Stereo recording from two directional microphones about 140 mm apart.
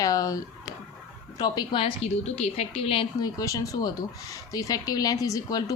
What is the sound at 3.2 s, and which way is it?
A woman's voice, 25° left (ahead or behind).